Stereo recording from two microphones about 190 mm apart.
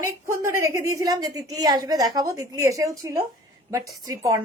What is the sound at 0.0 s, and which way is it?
A woman's voice, 15° right (ahead or behind).